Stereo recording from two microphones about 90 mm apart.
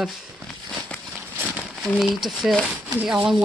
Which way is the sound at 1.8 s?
Centre (ahead or behind).